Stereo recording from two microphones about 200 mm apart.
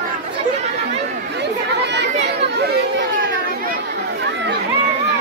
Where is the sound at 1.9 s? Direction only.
60° right (ahead or behind).